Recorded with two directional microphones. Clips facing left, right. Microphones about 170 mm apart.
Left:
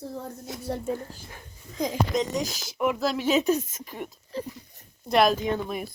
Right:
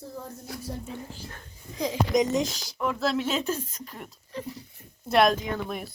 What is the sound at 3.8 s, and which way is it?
Speech, 5° left (ahead or behind).